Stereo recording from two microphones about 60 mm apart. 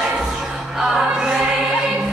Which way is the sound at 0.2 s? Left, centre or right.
Centre.